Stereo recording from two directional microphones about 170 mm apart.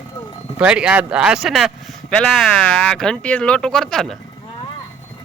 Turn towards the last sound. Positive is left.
turn(degrees=5)  # may be behind; listen again after turning